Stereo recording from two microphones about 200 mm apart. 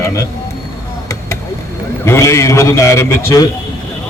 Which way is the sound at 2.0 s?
15° left (ahead or behind).